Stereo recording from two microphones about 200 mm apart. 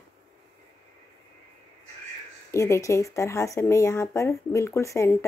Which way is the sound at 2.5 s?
15° left (ahead or behind).